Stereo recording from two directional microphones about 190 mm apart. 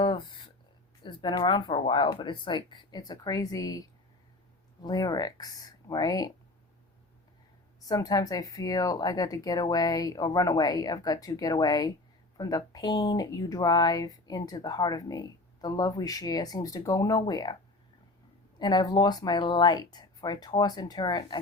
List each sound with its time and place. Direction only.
0.0 s a sound: 25° left (ahead or behind)
1.0 s speech: 25° left (ahead or behind)
7.8 s speech: 20° left (ahead or behind)
18.6 s speech: 20° left (ahead or behind)